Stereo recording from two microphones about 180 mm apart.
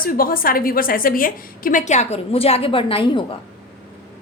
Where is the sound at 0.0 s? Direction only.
55° left (ahead or behind); by 3.2 s 25° left (ahead or behind).